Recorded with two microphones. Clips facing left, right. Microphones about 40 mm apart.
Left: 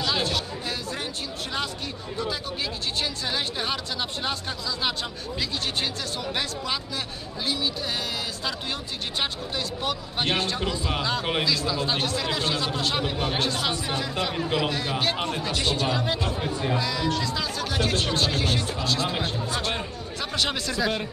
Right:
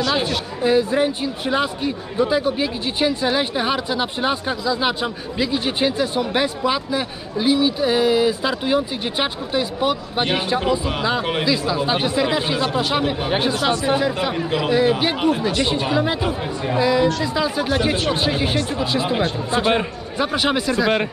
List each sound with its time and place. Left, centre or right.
0.1 s speech: centre